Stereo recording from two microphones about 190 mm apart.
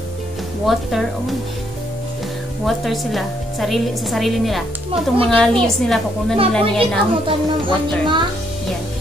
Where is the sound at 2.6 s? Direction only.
Centre (ahead or behind).